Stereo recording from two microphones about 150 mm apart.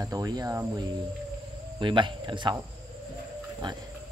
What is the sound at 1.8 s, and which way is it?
Speech, 30° right (ahead or behind).